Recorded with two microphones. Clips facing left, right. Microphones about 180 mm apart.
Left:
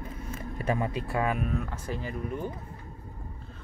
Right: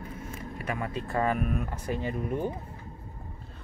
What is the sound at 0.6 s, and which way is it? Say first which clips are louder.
Speech: left 5 dB; 25° left (ahead or behind).